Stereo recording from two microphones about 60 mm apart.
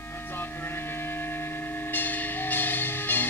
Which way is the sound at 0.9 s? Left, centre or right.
Left.